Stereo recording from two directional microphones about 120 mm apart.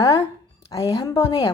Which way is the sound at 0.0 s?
30° left (ahead or behind).